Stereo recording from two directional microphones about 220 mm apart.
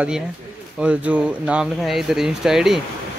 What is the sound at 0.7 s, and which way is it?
Speech, 5° right (ahead or behind).